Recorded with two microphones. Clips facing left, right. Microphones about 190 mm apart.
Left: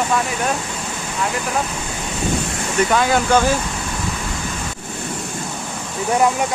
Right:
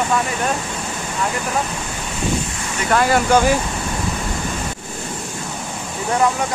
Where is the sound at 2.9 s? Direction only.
5° right (ahead or behind).